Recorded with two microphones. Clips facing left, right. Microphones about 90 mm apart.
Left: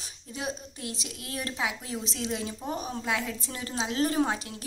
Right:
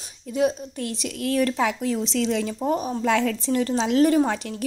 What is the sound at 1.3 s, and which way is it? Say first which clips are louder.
Speech: right 13 dB; 60° right (ahead or behind).